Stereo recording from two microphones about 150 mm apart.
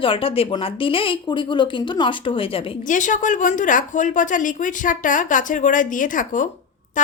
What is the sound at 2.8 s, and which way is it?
A woman's voice, 60° left (ahead or behind).